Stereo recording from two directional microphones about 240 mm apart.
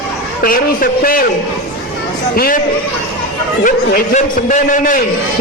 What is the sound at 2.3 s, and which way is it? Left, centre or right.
Speech, left.